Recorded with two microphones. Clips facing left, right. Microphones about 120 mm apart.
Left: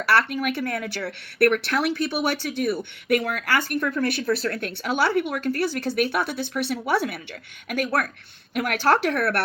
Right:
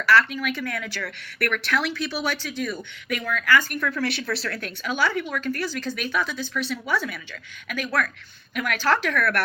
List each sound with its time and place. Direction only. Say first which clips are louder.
0.0 s speech: right 1 dB; 60° left (ahead or behind)
3.8 s speech: left 3 dB; 25° left (ahead or behind)
4.0 s speech: left 4 dB; 50° left (ahead or behind)
7.9 s speech: right 1 dB; 25° left (ahead or behind)
8.5 s speech: left 3 dB; 60° left (ahead or behind)
9.1 s speech: even; 30° left (ahead or behind)